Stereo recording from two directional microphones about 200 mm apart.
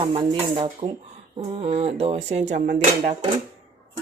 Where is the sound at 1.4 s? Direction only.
30° right (ahead or behind).